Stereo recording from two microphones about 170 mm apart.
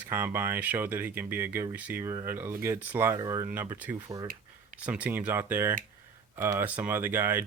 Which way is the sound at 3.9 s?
20° right (ahead or behind).